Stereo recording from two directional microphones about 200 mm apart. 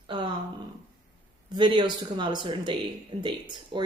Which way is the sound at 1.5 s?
20° right (ahead or behind).